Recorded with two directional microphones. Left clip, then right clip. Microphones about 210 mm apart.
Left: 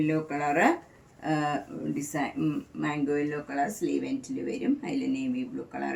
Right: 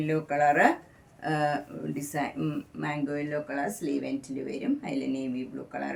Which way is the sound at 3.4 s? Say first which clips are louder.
Left 3 dB; 25° right (ahead or behind).